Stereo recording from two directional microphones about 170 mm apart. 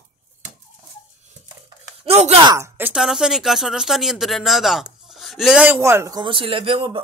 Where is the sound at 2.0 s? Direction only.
40° right (ahead or behind).